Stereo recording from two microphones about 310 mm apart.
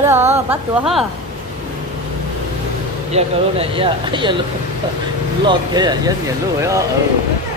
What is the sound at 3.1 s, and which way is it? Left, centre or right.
Speech, centre.